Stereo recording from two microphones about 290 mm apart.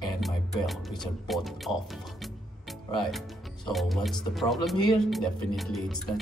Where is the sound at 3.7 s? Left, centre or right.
Centre.